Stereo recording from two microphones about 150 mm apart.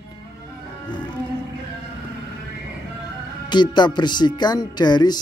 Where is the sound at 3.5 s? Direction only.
30° left (ahead or behind).